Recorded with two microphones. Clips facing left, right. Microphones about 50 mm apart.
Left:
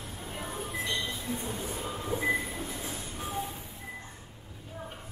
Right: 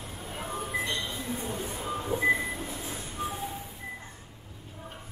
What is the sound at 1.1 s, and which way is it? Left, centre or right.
Train, right.